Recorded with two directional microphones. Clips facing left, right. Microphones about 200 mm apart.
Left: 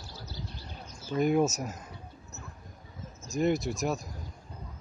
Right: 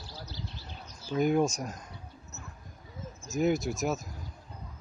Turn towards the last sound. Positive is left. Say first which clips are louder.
# even
turn(degrees=0)  # may be behind; listen again after turning